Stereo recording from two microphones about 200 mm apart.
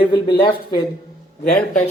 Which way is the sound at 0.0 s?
20° left (ahead or behind).